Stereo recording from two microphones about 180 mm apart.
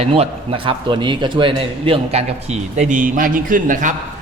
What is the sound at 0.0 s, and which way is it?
A man's voice, 30° right (ahead or behind).